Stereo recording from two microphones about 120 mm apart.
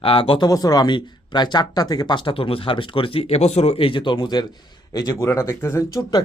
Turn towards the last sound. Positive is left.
turn(degrees=30)  # may be behind; listen again after turning